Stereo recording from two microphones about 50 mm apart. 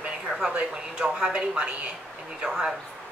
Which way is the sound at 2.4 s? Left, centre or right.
Centre.